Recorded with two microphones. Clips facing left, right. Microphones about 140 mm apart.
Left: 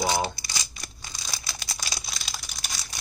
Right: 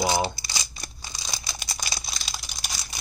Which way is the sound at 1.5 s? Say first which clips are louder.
Right 2 dB; 15° right (ahead or behind).